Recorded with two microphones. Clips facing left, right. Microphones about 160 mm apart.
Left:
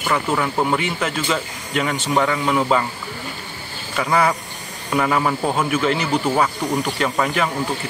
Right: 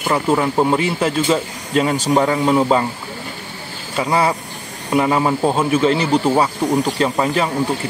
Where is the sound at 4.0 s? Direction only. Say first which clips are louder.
Right 1 dB; 25° right (ahead or behind).